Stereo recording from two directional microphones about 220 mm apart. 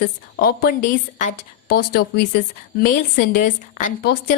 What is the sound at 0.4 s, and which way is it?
A woman's voice, 40° left (ahead or behind).